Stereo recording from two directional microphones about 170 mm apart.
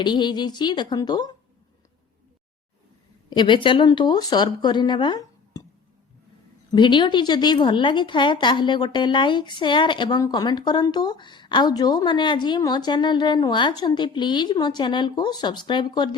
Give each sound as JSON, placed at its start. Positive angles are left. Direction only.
{"t": 0.0, "sound": "a woman's voice", "side_deg": 25}
{"t": 3.2, "sound": "a woman's voice", "side_deg": 25}
{"t": 6.7, "sound": "a woman's voice", "side_deg": 25}